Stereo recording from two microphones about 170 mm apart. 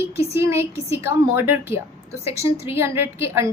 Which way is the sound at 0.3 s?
15° right (ahead or behind).